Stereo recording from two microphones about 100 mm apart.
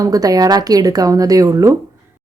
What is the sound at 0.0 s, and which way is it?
A woman's voice, 35° right (ahead or behind).